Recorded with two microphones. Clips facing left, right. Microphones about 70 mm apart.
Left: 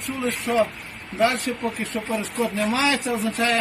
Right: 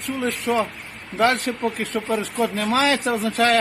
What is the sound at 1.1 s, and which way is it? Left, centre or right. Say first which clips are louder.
Speech: right 2 dB; right.